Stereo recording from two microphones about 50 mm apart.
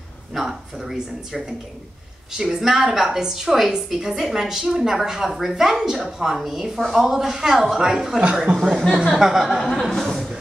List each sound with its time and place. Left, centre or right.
0.3 s speech: centre
2.3 s a woman's voice: centre
8.5 s speech: right
8.9 s a woman's voice: centre
9.6 s speech: centre